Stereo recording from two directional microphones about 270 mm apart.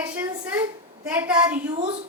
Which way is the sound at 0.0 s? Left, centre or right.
Centre.